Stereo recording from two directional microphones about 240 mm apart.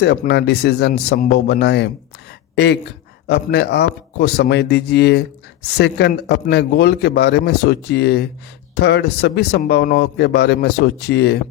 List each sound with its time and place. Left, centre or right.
0.0 s a man's voice: left
3.2 s a man's voice: left